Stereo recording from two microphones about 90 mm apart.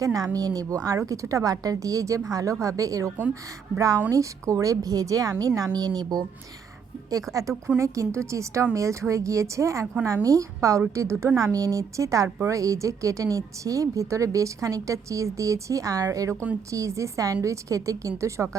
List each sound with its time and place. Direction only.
0.0 s a woman's voice: 40° right (ahead or behind)